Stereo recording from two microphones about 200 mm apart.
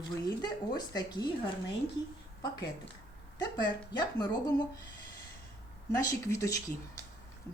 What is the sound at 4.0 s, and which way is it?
Speech, 20° left (ahead or behind).